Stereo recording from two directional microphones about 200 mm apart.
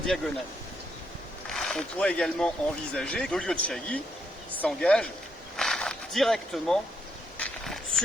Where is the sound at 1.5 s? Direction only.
Centre (ahead or behind).